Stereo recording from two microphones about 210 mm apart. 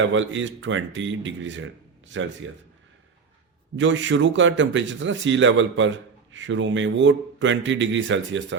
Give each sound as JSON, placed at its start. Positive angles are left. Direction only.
{"t": 0.0, "sound": "speech", "side_deg": -65}
{"t": 3.8, "sound": "speech", "side_deg": -60}